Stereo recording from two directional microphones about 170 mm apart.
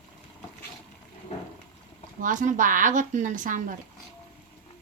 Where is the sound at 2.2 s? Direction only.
50° right (ahead or behind).